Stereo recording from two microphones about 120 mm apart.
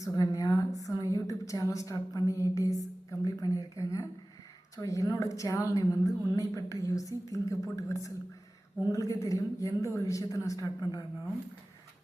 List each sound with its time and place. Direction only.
0.0 s a woman's voice: 30° left (ahead or behind)